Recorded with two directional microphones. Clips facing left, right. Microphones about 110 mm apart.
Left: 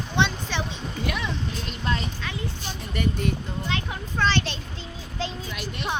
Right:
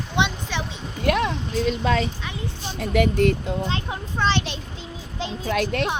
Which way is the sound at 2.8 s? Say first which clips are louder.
Right 9 dB; 90° right.